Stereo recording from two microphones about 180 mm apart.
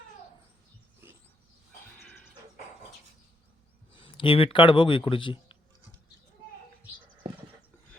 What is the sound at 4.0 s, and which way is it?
A man's voice, 30° left (ahead or behind).